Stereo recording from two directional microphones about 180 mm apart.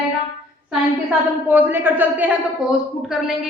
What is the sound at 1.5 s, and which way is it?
A man's voice, 10° right (ahead or behind).